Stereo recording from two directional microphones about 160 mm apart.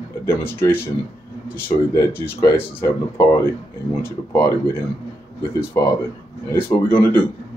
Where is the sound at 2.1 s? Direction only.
15° left (ahead or behind).